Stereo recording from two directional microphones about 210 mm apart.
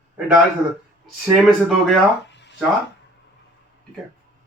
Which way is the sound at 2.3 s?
55° left (ahead or behind).